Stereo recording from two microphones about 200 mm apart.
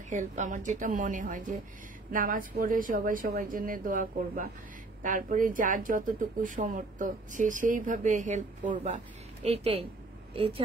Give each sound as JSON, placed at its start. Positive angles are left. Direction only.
{"t": 0.1, "sound": "a woman's voice", "side_deg": -35}